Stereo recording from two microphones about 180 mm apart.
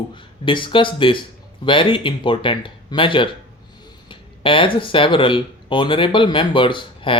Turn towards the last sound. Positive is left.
turn(degrees=25)  # may be behind; listen again after turning